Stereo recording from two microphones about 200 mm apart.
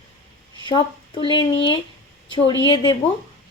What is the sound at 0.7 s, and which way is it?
Speech, 20° left (ahead or behind).